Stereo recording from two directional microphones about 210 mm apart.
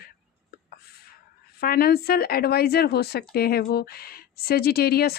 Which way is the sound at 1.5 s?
45° left (ahead or behind).